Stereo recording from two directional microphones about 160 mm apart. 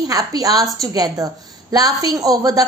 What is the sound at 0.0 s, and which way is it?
A woman's voice, 25° right (ahead or behind).